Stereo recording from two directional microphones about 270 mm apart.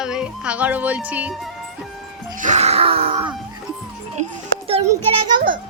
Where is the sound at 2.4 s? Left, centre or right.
Right.